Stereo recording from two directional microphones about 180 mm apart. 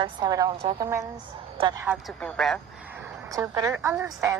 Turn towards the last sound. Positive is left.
turn(degrees=-15)  # may be behind; listen again after turning